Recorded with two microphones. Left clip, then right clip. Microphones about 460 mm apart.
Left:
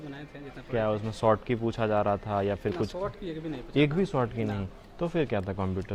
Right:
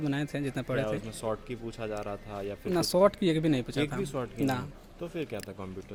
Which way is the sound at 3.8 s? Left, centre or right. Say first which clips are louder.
Left 6 dB; left.